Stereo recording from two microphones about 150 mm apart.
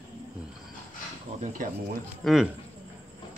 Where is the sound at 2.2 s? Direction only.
Centre (ahead or behind).